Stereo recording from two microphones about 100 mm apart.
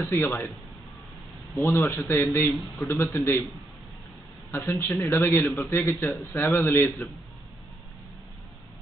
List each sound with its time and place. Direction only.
0.1 s a man's voice: 20° left (ahead or behind)
1.6 s a man's voice: 25° left (ahead or behind)
4.5 s a man's voice: 25° left (ahead or behind)